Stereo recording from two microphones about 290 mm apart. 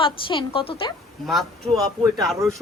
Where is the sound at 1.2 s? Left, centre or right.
Centre.